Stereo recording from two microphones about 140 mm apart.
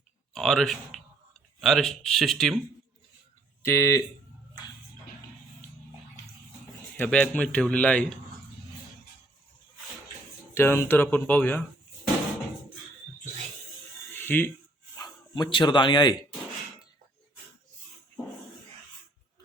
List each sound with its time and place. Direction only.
0.3 s speech: centre (ahead or behind)
3.6 s speech: 20° left (ahead or behind)
6.9 s a man's voice: 10° left (ahead or behind)
10.5 s a man's voice: 15° left (ahead or behind)
14.1 s a sound: 15° left (ahead or behind)
14.9 s speech: 30° left (ahead or behind)